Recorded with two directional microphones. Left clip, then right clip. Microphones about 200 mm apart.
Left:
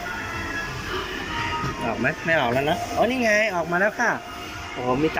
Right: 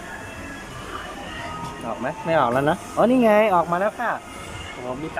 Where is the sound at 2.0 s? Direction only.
20° right (ahead or behind).